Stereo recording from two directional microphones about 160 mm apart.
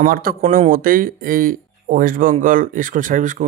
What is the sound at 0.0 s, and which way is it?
Speech, 65° right (ahead or behind).